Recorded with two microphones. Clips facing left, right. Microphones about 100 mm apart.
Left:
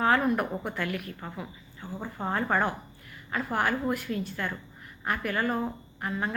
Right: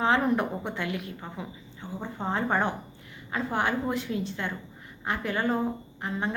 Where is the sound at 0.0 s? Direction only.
20° right (ahead or behind).